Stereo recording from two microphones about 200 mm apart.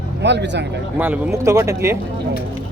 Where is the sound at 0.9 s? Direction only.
10° right (ahead or behind).